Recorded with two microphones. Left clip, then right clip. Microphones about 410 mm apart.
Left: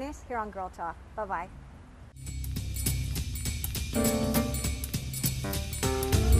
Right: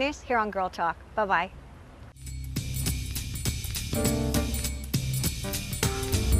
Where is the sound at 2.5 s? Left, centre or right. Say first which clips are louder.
Right 3 dB; centre.